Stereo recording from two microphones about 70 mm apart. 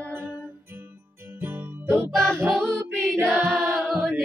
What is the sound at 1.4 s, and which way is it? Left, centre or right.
Music, right.